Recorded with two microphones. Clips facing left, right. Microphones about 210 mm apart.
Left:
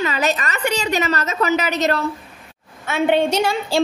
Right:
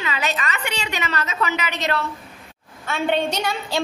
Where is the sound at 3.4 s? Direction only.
30° left (ahead or behind).